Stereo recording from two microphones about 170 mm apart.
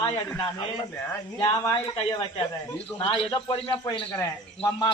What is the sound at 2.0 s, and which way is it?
A man's voice, 35° left (ahead or behind).